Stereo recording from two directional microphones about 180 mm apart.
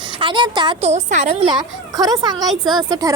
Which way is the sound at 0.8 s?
40° right (ahead or behind).